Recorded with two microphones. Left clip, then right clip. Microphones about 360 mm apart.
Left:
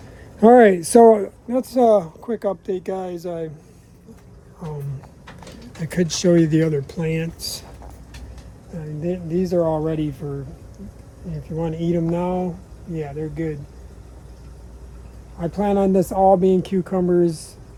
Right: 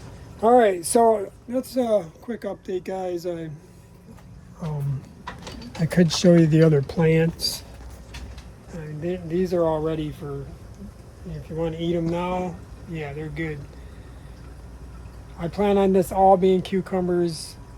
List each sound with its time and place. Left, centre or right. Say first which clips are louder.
0.4 s speech: left 5 dB; left
5.8 s speech: right 1 dB; centre
9.0 s speech: left 2 dB; centre
11.6 s speech: left 2 dB; centre
15.4 s speech: left 1 dB; centre